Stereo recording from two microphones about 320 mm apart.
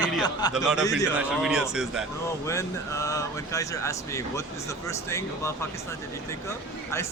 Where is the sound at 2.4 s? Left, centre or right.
Centre.